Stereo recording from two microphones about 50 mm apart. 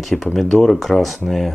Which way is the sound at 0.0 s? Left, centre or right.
Centre.